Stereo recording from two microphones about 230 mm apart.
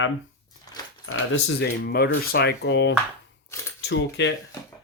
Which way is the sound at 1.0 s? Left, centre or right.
Left.